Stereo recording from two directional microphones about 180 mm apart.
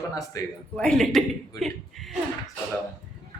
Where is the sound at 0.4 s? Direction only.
20° left (ahead or behind).